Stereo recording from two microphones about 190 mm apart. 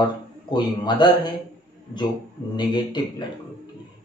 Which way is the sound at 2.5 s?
25° left (ahead or behind).